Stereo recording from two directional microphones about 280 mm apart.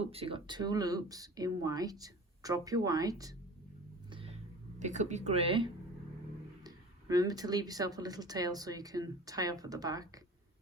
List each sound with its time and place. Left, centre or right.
0.0 s speech: right
4.8 s speech: right